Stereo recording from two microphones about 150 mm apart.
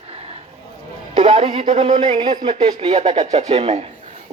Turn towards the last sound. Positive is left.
turn(degrees=-45)  # may be behind; listen again after turning